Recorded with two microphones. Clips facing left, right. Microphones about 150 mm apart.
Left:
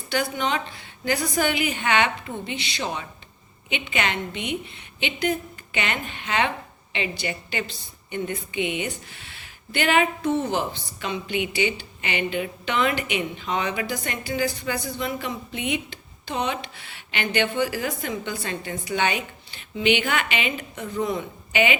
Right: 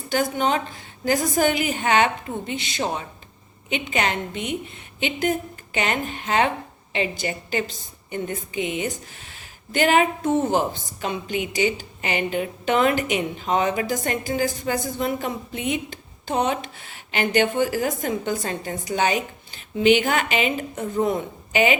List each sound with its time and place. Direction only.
0.1 s a woman's voice: 45° right (ahead or behind)